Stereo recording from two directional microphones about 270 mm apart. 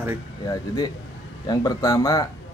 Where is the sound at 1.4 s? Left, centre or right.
Centre.